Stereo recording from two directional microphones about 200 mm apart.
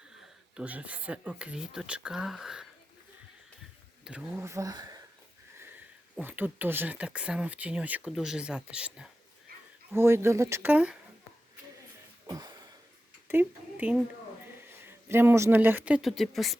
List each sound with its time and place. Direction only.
0.2 s speech: 5° right (ahead or behind)
4.0 s speech: 10° right (ahead or behind)
6.1 s speech: 10° right (ahead or behind)
12.2 s a sound: 20° right (ahead or behind)
13.2 s speech: 10° right (ahead or behind)